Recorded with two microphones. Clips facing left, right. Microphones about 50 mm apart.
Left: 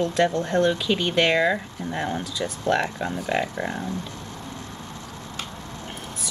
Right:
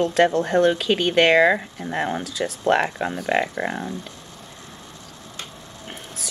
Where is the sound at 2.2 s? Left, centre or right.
Right.